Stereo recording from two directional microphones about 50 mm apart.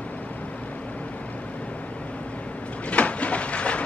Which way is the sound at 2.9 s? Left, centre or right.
Left.